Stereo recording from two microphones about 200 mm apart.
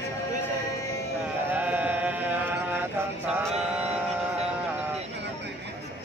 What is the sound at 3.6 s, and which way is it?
Music, 5° right (ahead or behind).